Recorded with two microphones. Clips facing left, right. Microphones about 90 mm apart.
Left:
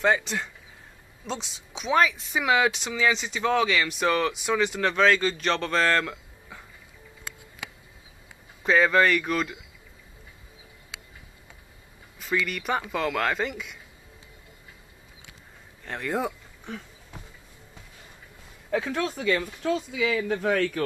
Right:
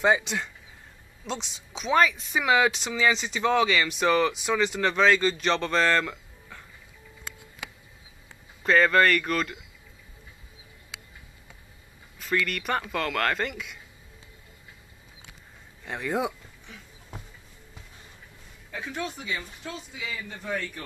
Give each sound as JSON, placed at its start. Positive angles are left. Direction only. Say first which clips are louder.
{"t": 0.2, "sound": "speech", "louder": "even", "side_deg": 0}
{"t": 8.6, "sound": "speech", "louder": "even", "side_deg": 5}
{"t": 12.2, "sound": "speech", "louder": "even", "side_deg": 5}
{"t": 15.8, "sound": "speech", "louder": "even", "side_deg": -5}
{"t": 18.7, "sound": "speech", "louder": "left 7 dB", "side_deg": 80}